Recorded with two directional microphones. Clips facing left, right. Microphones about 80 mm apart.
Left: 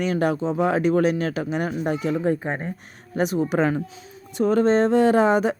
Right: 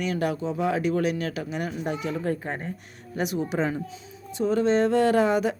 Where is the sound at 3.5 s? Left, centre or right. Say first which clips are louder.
Left 5 dB; left.